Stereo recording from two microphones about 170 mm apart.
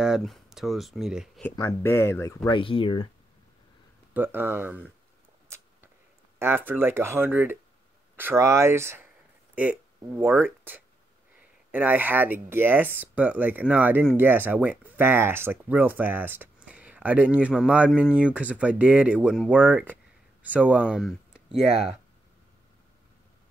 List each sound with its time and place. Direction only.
0.0 s speech: centre (ahead or behind)
1.4 s speech: 15° left (ahead or behind)
2.5 s speech: 30° left (ahead or behind)
4.1 s speech: 10° right (ahead or behind)
6.4 s speech: 15° right (ahead or behind)